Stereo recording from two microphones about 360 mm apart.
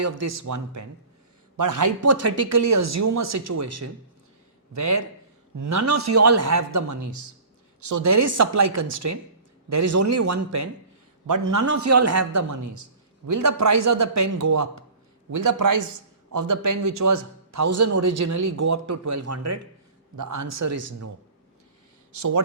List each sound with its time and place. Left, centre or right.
0.0 s a man's voice: right